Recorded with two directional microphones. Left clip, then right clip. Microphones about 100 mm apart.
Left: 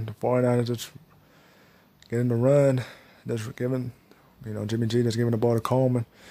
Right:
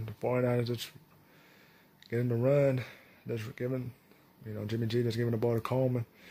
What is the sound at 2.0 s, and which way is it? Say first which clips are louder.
Speech: left 6 dB; 35° left (ahead or behind).